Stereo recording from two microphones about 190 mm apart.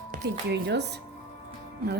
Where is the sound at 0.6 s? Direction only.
60° right (ahead or behind).